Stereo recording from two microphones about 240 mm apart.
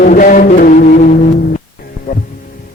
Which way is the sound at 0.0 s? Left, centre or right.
Left.